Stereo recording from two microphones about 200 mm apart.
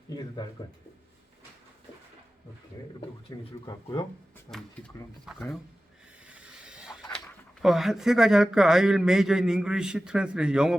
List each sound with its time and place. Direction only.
0.4 s speech: 20° left (ahead or behind)
3.3 s speech: 15° left (ahead or behind)
5.2 s a man's voice: centre (ahead or behind)
6.2 s vehicle: 5° right (ahead or behind)
7.6 s a man's voice: centre (ahead or behind)